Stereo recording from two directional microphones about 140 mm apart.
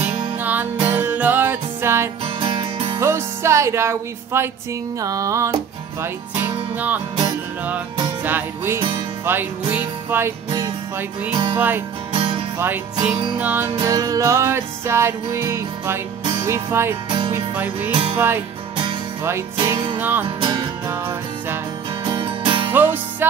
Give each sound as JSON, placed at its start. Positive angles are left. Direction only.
{"t": 0.4, "sound": "music", "side_deg": -10}
{"t": 2.2, "sound": "music", "side_deg": -35}
{"t": 3.0, "sound": "music", "side_deg": -20}
{"t": 11.5, "sound": "music", "side_deg": -15}
{"t": 12.1, "sound": "music", "side_deg": -35}
{"t": 12.5, "sound": "music", "side_deg": -15}
{"t": 13.8, "sound": "music", "side_deg": -25}
{"t": 17.9, "sound": "music", "side_deg": -35}
{"t": 19.5, "sound": "music", "side_deg": -30}
{"t": 20.0, "sound": "music", "side_deg": -15}
{"t": 20.2, "sound": "music", "side_deg": -35}
{"t": 22.0, "sound": "music", "side_deg": -35}
{"t": 22.7, "sound": "music", "side_deg": -15}